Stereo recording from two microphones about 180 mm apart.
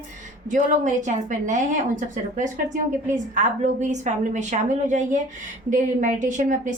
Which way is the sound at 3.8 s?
40° right (ahead or behind).